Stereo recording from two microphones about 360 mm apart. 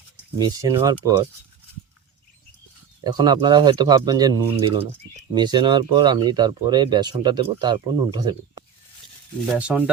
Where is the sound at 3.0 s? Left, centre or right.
Centre.